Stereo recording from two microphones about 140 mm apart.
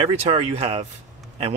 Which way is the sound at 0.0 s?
45° right (ahead or behind).